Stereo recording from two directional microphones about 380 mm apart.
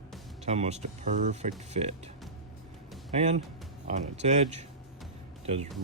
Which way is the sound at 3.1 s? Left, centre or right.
Centre.